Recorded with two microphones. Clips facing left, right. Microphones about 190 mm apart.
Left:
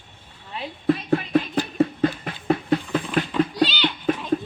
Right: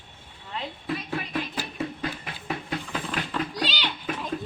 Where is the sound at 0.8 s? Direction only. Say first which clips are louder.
Left 12 dB; 50° left (ahead or behind).